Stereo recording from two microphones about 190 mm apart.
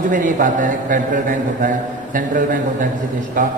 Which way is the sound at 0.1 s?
45° right (ahead or behind).